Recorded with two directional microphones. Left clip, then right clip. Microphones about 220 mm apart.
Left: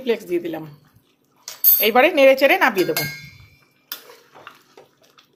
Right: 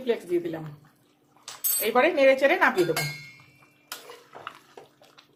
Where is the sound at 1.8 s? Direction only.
35° left (ahead or behind).